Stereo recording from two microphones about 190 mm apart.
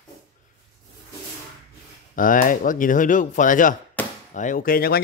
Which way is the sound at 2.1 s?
45° left (ahead or behind).